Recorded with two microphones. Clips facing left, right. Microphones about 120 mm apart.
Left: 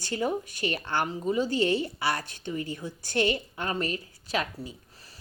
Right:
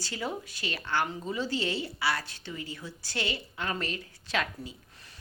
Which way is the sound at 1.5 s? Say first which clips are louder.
Left 6 dB; 50° left (ahead or behind).